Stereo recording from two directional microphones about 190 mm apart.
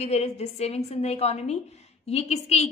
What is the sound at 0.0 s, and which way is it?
A woman's voice, 35° left (ahead or behind).